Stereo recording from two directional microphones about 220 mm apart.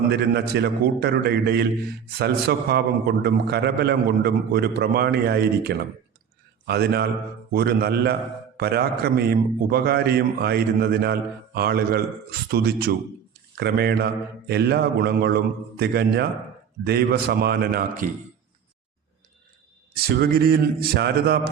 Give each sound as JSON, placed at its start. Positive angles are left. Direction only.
{"t": 0.1, "sound": "a man's voice", "side_deg": -50}
{"t": 20.0, "sound": "a man's voice", "side_deg": -45}